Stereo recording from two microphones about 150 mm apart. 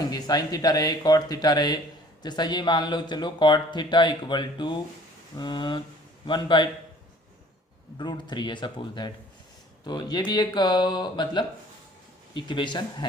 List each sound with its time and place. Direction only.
0.1 s a man's voice: 25° left (ahead or behind)
7.9 s a man's voice: 30° left (ahead or behind)